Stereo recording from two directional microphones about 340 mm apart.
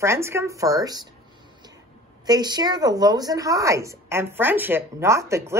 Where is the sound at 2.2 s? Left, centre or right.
Centre.